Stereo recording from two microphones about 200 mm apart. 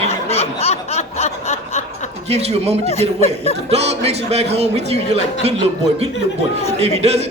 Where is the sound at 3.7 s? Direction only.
30° right (ahead or behind).